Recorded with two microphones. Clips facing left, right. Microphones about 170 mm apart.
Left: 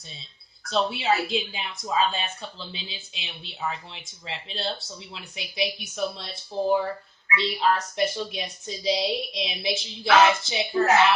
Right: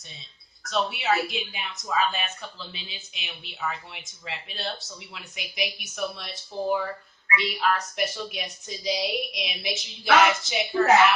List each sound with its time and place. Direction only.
0.7 s a woman's voice: 30° left (ahead or behind)